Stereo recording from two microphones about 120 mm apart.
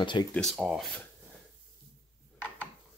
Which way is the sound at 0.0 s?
40° left (ahead or behind).